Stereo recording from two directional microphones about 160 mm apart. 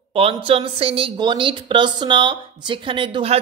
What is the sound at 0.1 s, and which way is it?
Speech, 35° right (ahead or behind).